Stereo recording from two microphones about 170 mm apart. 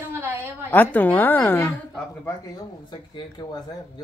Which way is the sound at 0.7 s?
10° left (ahead or behind).